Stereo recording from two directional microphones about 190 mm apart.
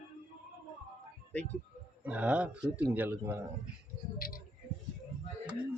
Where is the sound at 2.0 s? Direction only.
5° right (ahead or behind).